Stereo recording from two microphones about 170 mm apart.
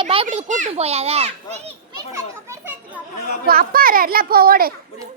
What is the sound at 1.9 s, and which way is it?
Children playing, 15° right (ahead or behind).